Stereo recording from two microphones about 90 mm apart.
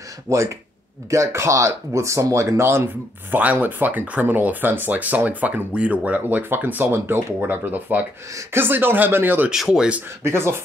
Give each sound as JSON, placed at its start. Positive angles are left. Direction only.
{"t": 0.3, "sound": "speech", "side_deg": -35}
{"t": 3.3, "sound": "speech", "side_deg": -20}
{"t": 9.5, "sound": "speech", "side_deg": -5}
{"t": 10.2, "sound": "speech", "side_deg": -30}